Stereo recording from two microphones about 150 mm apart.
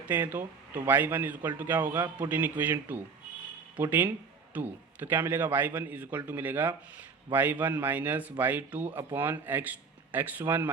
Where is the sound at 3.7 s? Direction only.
15° right (ahead or behind).